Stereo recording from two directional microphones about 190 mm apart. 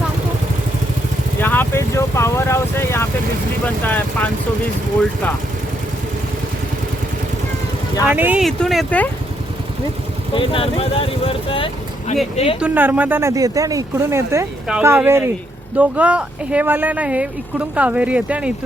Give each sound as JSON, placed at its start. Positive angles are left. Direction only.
{"t": 1.4, "sound": "speech", "side_deg": 10}
{"t": 8.0, "sound": "speech", "side_deg": -10}
{"t": 10.3, "sound": "speech", "side_deg": 30}
{"t": 12.5, "sound": "speech", "side_deg": -5}